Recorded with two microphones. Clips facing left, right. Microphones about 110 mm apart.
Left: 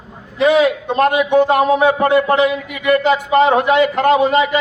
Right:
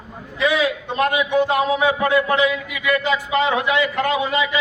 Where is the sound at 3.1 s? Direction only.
55° left (ahead or behind).